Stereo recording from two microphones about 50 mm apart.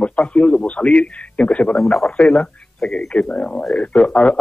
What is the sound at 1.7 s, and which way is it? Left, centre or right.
A man's voice, centre.